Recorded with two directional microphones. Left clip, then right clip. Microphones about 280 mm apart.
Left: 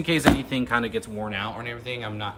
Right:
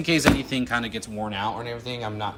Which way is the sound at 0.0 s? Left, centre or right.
Centre.